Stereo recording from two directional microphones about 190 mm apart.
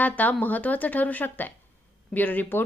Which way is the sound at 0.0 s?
10° left (ahead or behind).